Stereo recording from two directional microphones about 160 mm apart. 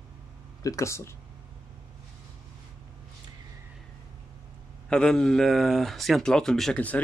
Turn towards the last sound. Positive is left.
turn(degrees=5)  # may be behind; listen again after turning